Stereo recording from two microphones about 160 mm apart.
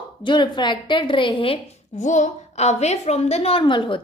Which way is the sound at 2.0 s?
50° left (ahead or behind).